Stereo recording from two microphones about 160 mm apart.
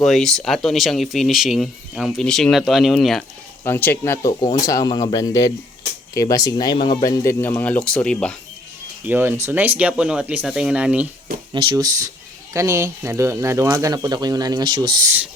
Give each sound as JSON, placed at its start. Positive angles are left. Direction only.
{"t": 0.0, "sound": "speech", "side_deg": 0}
{"t": 3.6, "sound": "speech", "side_deg": 15}
{"t": 7.0, "sound": "speech", "side_deg": 20}
{"t": 9.0, "sound": "speech", "side_deg": -15}
{"t": 11.5, "sound": "speech", "side_deg": -25}